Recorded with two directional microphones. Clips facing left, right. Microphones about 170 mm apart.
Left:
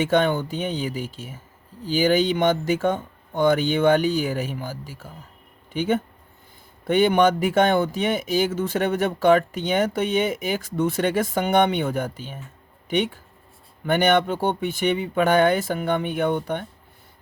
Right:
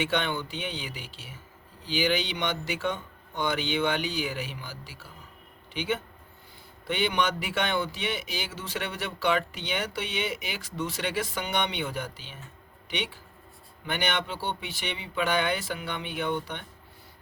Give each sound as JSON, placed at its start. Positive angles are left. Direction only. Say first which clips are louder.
{"t": 0.0, "sound": "speech", "louder": "left 9 dB", "side_deg": 45}